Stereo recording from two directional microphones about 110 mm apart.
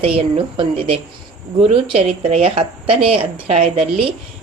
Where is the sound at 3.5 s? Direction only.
70° right (ahead or behind).